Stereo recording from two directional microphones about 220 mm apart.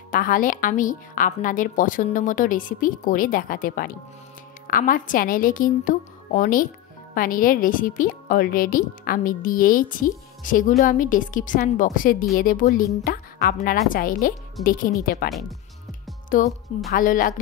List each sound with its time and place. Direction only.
0.1 s a woman's voice: 40° left (ahead or behind)
16.3 s a woman's voice: 40° left (ahead or behind)